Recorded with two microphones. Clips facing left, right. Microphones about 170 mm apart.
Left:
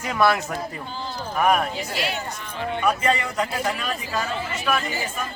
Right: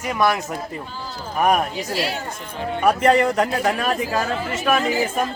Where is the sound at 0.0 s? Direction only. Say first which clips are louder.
Even; 10° right (ahead or behind).